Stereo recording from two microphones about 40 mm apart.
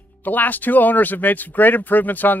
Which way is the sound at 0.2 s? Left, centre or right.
Left.